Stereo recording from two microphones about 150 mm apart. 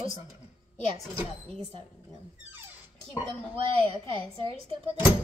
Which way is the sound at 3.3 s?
35° right (ahead or behind).